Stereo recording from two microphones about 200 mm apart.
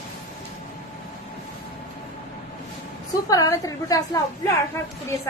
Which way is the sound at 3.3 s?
20° left (ahead or behind).